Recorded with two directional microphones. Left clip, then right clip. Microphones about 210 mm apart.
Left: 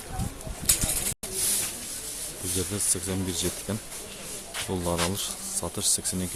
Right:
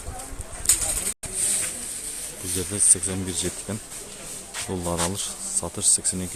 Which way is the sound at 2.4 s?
30° right (ahead or behind).